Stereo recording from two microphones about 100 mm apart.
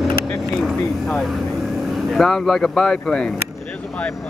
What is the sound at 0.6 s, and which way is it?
Speech, 5° left (ahead or behind).